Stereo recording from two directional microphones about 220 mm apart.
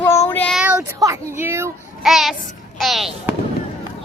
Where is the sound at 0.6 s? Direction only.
5° right (ahead or behind).